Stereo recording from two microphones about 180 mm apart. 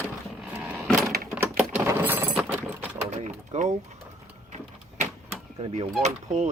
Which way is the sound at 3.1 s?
40° right (ahead or behind).